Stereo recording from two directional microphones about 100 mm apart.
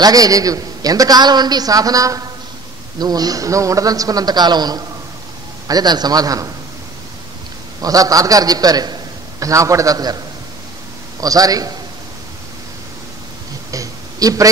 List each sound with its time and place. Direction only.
0.0 s a man's voice: 40° right (ahead or behind)
7.8 s a man's voice: 35° right (ahead or behind)
13.7 s a sound: 35° right (ahead or behind)